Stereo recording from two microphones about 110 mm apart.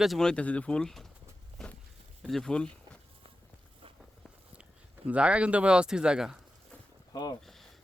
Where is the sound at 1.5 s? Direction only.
10° left (ahead or behind).